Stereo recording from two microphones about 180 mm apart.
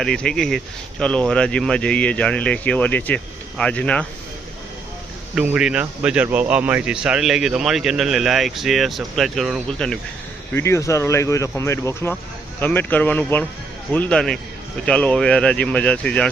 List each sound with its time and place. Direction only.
0.0 s a man's voice: 5° left (ahead or behind)
5.3 s a man's voice: 5° right (ahead or behind)
10.5 s a man's voice: 15° left (ahead or behind)